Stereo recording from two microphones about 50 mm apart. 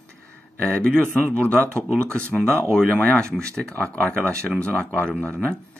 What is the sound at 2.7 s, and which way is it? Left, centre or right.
Speech, centre.